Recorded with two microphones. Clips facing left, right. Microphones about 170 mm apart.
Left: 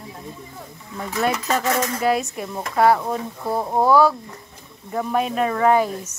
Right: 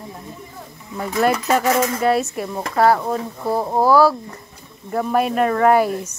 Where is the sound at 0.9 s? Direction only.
10° right (ahead or behind).